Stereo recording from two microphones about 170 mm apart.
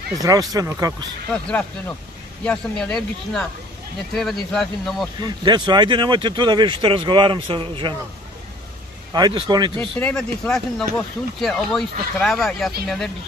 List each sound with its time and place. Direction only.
0.2 s speech: 20° right (ahead or behind)
1.3 s speech: 5° left (ahead or behind)
5.2 s speech: 25° right (ahead or behind)
9.1 s speech: 25° right (ahead or behind)
9.8 s speech: 10° left (ahead or behind)